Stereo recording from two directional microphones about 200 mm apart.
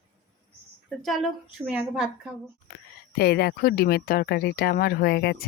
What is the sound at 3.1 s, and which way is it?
Speech, 50° left (ahead or behind).